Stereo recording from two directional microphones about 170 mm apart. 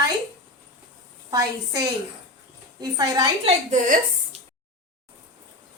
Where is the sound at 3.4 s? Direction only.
45° right (ahead or behind).